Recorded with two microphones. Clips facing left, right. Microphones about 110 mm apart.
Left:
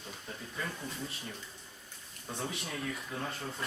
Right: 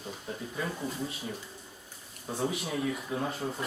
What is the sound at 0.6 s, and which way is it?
Speech, 10° right (ahead or behind).